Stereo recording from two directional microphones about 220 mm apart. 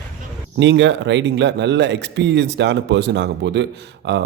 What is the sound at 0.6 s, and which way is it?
Speech, 55° right (ahead or behind).